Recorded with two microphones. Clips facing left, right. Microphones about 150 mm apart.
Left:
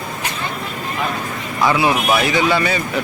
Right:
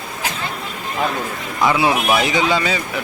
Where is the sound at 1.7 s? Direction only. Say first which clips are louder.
Even; 20° right (ahead or behind).